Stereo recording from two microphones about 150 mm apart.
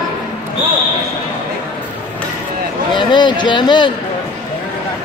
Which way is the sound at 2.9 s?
30° left (ahead or behind).